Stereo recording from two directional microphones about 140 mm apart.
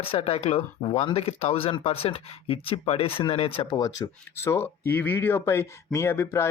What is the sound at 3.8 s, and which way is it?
Speech, 20° left (ahead or behind).